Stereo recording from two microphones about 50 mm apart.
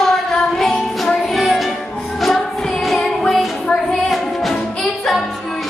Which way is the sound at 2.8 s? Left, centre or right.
Centre.